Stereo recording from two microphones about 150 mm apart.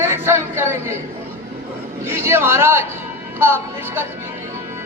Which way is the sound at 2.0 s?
15° right (ahead or behind).